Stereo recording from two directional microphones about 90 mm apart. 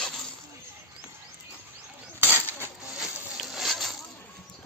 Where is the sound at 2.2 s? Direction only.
25° right (ahead or behind).